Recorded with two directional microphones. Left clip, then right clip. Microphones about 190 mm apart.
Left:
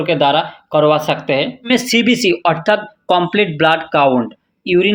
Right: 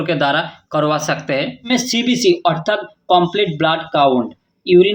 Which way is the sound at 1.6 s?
25° left (ahead or behind).